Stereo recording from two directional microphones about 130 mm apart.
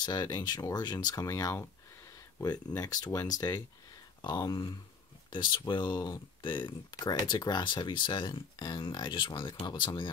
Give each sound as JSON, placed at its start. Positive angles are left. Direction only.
{"t": 0.0, "sound": "speech", "side_deg": 35}